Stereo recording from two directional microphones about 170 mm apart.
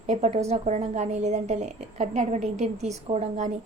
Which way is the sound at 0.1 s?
40° right (ahead or behind).